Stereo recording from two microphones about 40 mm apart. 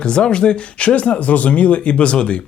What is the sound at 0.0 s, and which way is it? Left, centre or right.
Speech, left.